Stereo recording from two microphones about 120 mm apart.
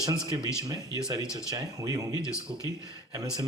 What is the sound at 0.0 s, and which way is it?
Speech, 35° right (ahead or behind).